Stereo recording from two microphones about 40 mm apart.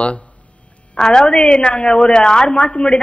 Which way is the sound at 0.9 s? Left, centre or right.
Centre.